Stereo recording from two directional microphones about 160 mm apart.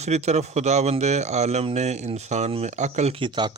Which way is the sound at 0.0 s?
45° right (ahead or behind).